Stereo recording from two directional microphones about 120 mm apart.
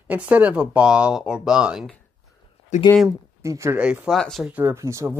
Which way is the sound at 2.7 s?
80° left.